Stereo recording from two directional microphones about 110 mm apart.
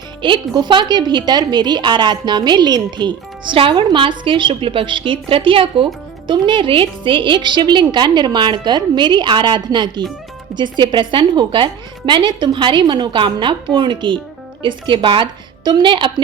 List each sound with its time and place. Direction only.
0.2 s a woman's voice: 45° right (ahead or behind)